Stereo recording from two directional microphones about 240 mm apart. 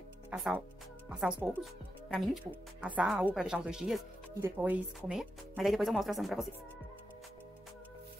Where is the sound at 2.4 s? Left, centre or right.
Centre.